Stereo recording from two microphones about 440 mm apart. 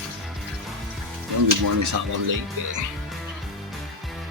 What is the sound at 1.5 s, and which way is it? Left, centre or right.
Speech, right.